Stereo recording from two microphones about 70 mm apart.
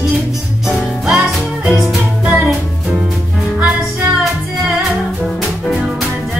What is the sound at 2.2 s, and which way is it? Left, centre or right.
Music, centre.